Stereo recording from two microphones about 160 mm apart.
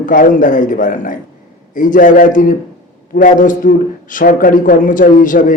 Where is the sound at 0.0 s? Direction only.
60° left (ahead or behind).